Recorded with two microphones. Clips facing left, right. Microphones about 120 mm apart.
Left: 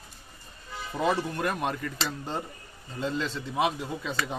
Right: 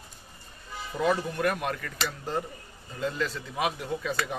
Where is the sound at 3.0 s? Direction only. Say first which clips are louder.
Even; 25° left (ahead or behind).